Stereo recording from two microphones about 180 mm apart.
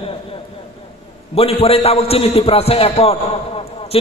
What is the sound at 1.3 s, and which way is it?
A man's voice, 35° left (ahead or behind).